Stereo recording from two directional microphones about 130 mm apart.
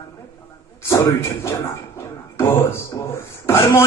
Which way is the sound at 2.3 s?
20° left (ahead or behind).